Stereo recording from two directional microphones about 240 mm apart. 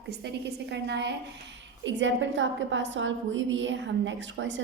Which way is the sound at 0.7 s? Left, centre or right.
Right.